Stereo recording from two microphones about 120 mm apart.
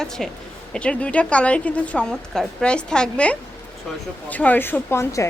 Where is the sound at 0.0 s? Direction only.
5° left (ahead or behind).